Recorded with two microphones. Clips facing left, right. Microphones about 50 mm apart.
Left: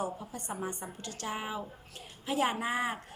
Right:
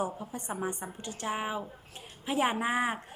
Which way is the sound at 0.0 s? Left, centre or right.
Centre.